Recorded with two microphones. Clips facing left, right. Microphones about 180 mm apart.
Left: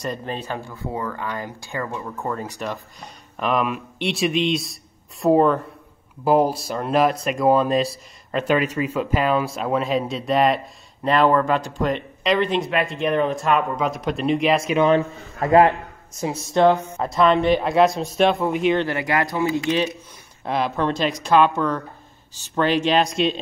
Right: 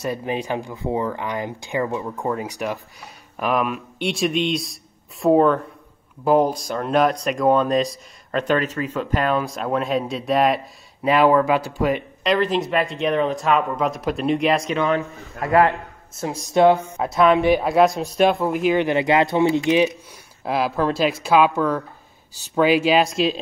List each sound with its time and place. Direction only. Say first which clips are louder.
0.0 s speech: right 3 dB; 10° right (ahead or behind)
15.4 s a man's voice: left 2 dB; 20° left (ahead or behind)
16.5 s speech: right 2 dB; 10° right (ahead or behind)
18.8 s speech: right 4 dB; 20° right (ahead or behind)
20.4 s speech: right 1 dB; 5° right (ahead or behind)